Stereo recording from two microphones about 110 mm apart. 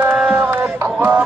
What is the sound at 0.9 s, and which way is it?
Music, 15° right (ahead or behind).